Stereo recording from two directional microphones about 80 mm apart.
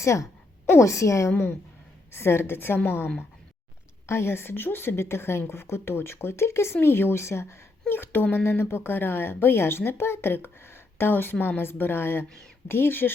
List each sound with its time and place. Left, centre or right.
0.0 s a woman's voice: left
1.3 s a woman's voice: left